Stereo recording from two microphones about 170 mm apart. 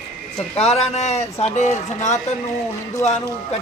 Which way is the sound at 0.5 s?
40° left (ahead or behind).